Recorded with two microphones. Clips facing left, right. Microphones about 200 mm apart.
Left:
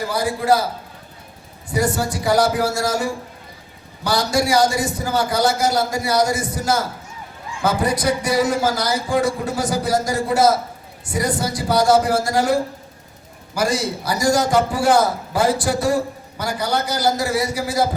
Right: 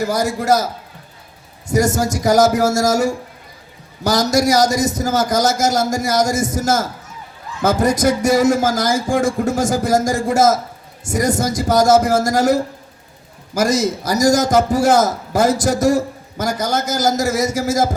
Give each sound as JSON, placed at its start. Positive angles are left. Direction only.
{"t": 0.0, "sound": "a man's voice", "side_deg": -45}